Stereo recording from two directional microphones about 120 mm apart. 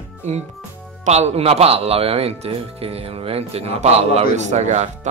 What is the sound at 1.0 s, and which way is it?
Speech, 65° right (ahead or behind).